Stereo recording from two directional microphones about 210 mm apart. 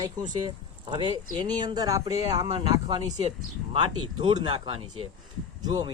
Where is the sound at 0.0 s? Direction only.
20° right (ahead or behind).